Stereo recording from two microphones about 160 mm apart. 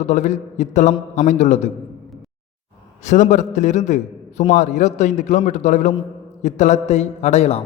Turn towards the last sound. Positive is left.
turn(degrees=40)  # may be behind; listen again after turning